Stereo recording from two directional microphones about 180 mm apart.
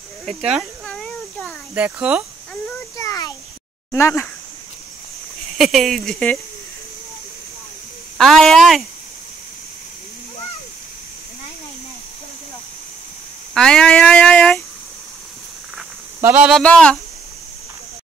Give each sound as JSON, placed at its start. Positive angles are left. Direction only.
{"t": 0.2, "sound": "a sound", "side_deg": 0}
{"t": 3.0, "sound": "a sound", "side_deg": 20}
{"t": 3.9, "sound": "speech", "side_deg": 15}
{"t": 5.6, "sound": "speech", "side_deg": 0}
{"t": 8.2, "sound": "speech", "side_deg": 0}
{"t": 13.6, "sound": "speech", "side_deg": 5}
{"t": 16.2, "sound": "speech", "side_deg": -10}
{"t": 16.6, "sound": "speech", "side_deg": 5}